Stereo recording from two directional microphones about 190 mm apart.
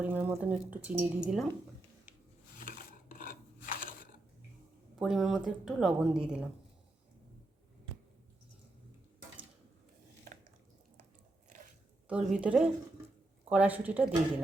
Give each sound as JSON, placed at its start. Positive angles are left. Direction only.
{"t": 0.0, "sound": "speech", "side_deg": -10}
{"t": 2.6, "sound": "wood", "side_deg": 45}
{"t": 4.9, "sound": "speech", "side_deg": 0}
{"t": 12.0, "sound": "a woman's voice", "side_deg": -5}